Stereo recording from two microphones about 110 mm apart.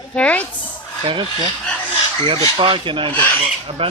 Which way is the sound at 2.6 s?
50° right (ahead or behind).